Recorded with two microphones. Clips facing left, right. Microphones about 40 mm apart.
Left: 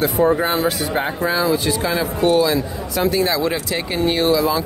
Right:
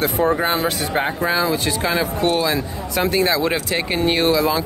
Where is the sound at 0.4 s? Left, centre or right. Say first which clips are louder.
Left 1 dB; right.